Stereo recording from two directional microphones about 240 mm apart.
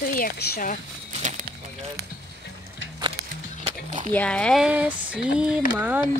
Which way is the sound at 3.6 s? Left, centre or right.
Right.